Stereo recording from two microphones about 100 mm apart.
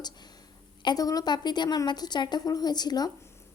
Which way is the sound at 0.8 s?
45° left (ahead or behind).